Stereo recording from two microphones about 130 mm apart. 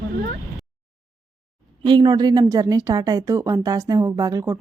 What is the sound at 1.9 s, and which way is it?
Speech, 35° right (ahead or behind).